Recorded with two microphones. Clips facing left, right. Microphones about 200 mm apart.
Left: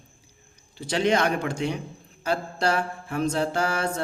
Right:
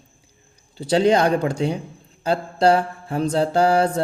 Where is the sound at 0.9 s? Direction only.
35° right (ahead or behind).